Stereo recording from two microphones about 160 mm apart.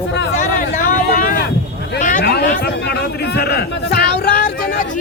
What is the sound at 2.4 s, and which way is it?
Speech, 80° left.